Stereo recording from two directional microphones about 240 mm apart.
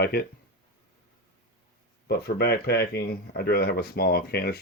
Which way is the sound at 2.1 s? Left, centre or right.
Left.